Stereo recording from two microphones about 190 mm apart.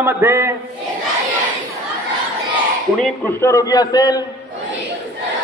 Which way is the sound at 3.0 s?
10° left (ahead or behind).